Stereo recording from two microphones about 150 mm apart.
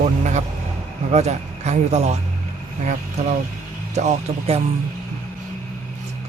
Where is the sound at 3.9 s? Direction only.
45° right (ahead or behind).